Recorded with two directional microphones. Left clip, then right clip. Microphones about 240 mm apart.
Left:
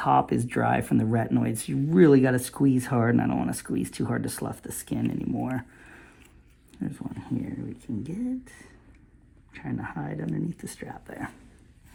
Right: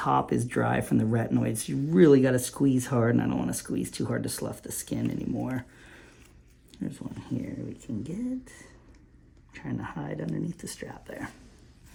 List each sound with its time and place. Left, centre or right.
0.0 s speech: centre
5.4 s a sound: centre
6.7 s speech: centre
9.6 s speech: centre